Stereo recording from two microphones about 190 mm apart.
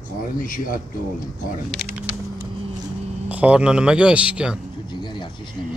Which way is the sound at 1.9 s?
5° right (ahead or behind).